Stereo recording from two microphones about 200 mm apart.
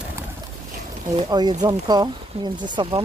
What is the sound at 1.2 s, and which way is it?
Speech, 20° right (ahead or behind).